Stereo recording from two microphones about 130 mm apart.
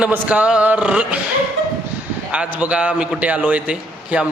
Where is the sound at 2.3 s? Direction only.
10° right (ahead or behind).